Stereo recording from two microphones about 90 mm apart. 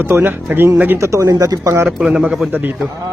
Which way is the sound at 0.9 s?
35° right (ahead or behind).